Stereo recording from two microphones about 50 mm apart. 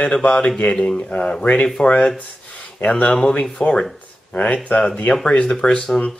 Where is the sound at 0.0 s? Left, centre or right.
Left.